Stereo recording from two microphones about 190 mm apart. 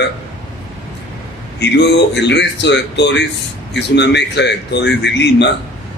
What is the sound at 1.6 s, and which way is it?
A man's voice, 65° left (ahead or behind).